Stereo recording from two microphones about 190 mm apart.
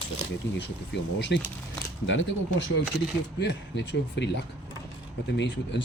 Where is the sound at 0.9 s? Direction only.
65° left (ahead or behind).